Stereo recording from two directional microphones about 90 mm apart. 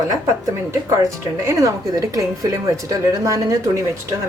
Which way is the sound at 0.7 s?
35° right (ahead or behind).